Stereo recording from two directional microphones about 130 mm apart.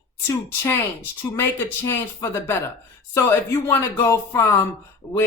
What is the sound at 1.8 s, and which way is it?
Speech, 20° left (ahead or behind).